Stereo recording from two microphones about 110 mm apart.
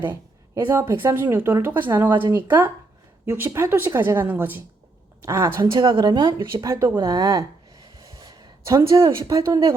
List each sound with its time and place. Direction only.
0.5 s a woman's voice: 20° right (ahead or behind)
5.7 s a woman's voice: 50° right (ahead or behind)
6.5 s a woman's voice: 30° right (ahead or behind)
7.9 s a sound: 30° right (ahead or behind)